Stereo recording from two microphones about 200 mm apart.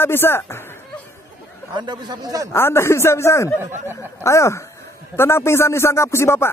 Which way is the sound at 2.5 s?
10° left (ahead or behind).